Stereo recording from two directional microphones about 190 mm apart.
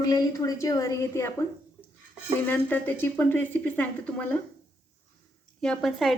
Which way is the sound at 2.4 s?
10° left (ahead or behind).